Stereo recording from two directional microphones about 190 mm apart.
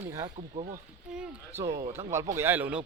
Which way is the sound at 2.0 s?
20° right (ahead or behind).